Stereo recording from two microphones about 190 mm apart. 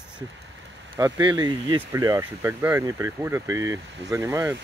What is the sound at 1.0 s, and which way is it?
Speech, 20° right (ahead or behind).